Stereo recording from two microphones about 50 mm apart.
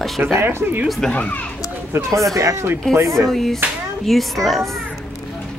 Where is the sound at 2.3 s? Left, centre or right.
Right.